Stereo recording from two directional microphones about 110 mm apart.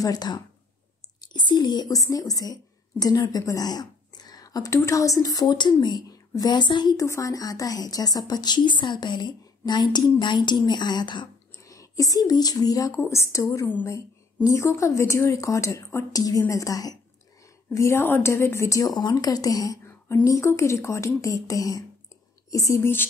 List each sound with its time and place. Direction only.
0.0 s a woman's voice: 35° left (ahead or behind)
7.1 s a woman's voice: 30° left (ahead or behind)
11.6 s a woman's voice: 30° left (ahead or behind)